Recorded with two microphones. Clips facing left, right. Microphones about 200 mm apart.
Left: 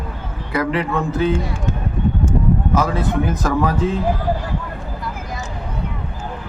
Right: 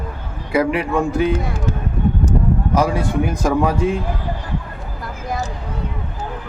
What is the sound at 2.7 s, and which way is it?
A man's voice, 10° right (ahead or behind).